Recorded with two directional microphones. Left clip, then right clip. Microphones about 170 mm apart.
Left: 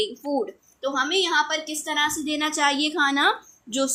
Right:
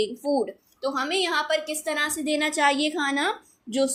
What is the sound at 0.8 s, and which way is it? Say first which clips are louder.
Speech: left 2 dB; 30° right (ahead or behind).